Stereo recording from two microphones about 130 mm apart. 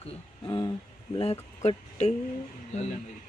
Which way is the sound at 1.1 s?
50° left (ahead or behind).